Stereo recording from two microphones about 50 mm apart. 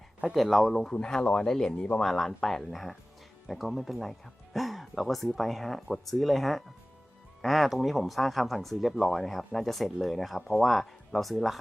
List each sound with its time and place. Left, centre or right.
0.3 s speech: centre
0.9 s speech: centre